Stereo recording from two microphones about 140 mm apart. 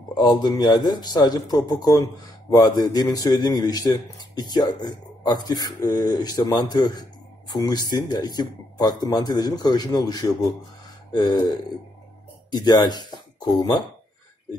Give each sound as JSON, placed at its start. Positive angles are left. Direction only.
{"t": 0.1, "sound": "a man's voice", "side_deg": 30}
{"t": 11.1, "sound": "a sound", "side_deg": 30}
{"t": 12.4, "sound": "speech", "side_deg": 30}